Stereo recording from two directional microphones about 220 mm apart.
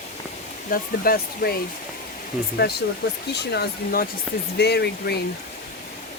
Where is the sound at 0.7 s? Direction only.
45° left (ahead or behind).